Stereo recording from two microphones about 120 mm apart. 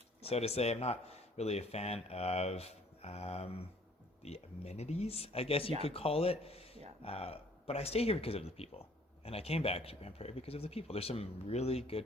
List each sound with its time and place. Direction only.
0.2 s speech: 60° left (ahead or behind)